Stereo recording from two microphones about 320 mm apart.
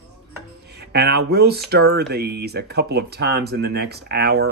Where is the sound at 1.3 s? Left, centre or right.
Right.